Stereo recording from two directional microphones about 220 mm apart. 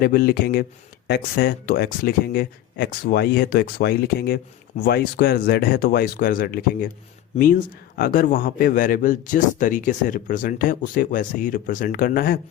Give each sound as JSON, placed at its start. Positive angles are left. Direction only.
{"t": 0.0, "sound": "a man's voice", "side_deg": 45}